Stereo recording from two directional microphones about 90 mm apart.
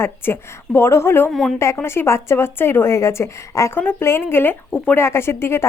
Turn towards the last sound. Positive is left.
turn(degrees=25)  # may be behind; listen again after turning